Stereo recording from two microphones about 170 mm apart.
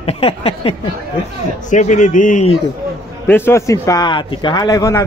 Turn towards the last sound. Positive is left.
turn(degrees=20)  # may be behind; listen again after turning